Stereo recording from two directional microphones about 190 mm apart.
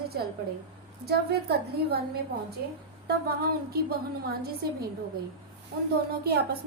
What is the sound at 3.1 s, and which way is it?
Speech, 55° right (ahead or behind).